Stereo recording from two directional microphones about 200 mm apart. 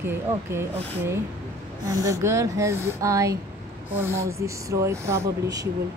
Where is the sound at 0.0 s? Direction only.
10° right (ahead or behind).